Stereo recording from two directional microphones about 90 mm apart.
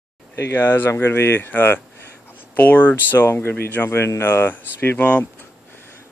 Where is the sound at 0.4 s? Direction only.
25° left (ahead or behind).